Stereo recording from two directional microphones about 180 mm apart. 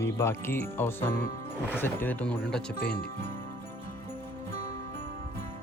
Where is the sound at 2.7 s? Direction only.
60° left (ahead or behind).